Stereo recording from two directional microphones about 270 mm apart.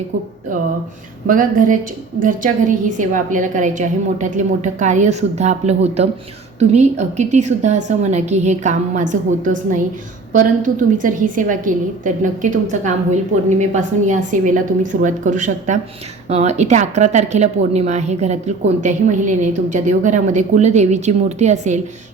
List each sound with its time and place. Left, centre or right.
1.3 s a woman's voice: right